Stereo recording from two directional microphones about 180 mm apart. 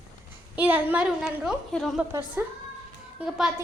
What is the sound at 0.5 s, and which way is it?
A woman's voice, 10° right (ahead or behind).